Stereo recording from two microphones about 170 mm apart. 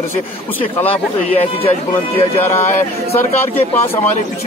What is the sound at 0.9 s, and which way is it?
Speech, 35° left (ahead or behind).